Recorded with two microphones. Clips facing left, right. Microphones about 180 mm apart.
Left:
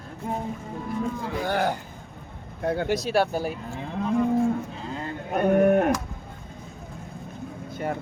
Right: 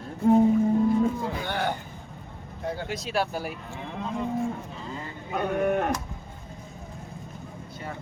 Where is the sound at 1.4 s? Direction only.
40° left (ahead or behind).